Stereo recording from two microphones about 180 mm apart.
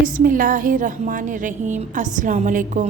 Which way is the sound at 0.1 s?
50° right (ahead or behind).